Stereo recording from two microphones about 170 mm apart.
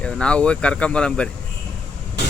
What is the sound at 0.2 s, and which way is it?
Speech, 5° left (ahead or behind).